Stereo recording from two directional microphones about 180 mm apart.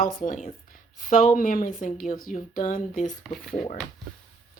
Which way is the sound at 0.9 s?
50° left (ahead or behind).